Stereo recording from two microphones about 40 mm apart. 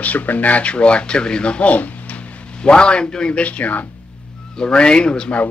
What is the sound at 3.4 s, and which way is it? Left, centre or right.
Speech, left.